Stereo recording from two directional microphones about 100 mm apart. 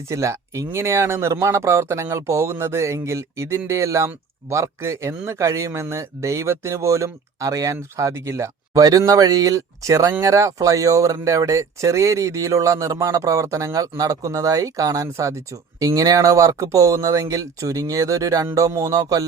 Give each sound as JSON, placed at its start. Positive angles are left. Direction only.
{"t": 0.1, "sound": "speech", "side_deg": -30}